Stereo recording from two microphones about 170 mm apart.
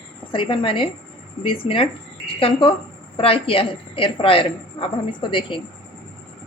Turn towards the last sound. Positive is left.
turn(degrees=30)  # may be behind; listen again after turning